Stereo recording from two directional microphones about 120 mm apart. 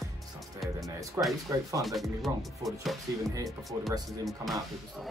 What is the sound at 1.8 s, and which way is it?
Speech, centre (ahead or behind).